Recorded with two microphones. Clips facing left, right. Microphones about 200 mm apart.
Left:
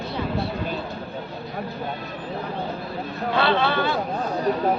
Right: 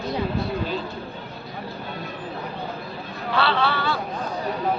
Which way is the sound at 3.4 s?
20° left (ahead or behind).